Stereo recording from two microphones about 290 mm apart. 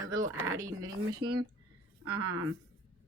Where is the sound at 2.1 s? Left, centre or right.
Right.